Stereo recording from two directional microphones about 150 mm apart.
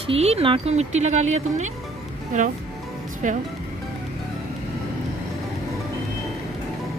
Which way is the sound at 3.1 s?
60° right (ahead or behind).